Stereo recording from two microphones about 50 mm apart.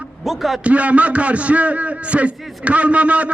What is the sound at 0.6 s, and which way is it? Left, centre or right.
A man's voice, right.